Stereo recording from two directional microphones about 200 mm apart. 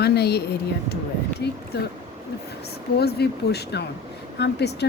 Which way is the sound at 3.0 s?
55° left (ahead or behind).